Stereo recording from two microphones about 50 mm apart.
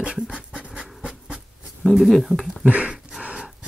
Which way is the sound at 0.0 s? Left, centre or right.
Right.